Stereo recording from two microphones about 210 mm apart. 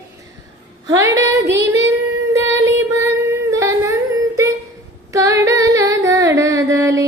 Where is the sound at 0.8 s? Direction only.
15° right (ahead or behind).